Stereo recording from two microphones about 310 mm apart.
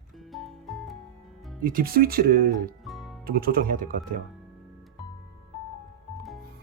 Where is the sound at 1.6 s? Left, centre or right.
Right.